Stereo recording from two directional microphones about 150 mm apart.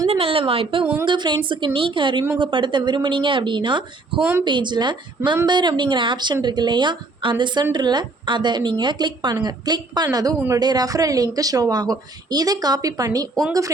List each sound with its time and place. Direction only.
0.1 s a woman's voice: 40° right (ahead or behind)